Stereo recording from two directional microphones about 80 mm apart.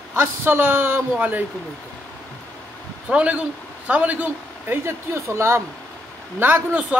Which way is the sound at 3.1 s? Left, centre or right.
Centre.